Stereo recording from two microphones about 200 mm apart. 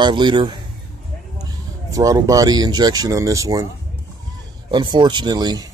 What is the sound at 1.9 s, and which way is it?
Speech, 15° right (ahead or behind).